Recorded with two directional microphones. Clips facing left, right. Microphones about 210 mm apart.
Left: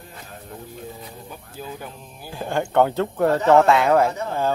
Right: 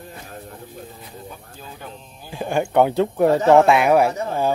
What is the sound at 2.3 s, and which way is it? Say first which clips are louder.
Speech: right 2 dB; 15° right (ahead or behind).